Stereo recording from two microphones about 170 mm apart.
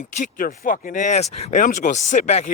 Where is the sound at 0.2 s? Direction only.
50° left (ahead or behind).